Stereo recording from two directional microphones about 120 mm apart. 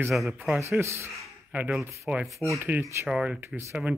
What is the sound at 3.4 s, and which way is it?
Speech, 20° right (ahead or behind).